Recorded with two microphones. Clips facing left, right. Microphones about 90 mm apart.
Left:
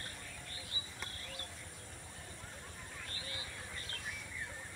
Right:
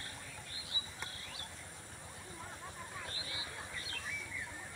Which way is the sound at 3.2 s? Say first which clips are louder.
Right 1 dB; 45° left (ahead or behind).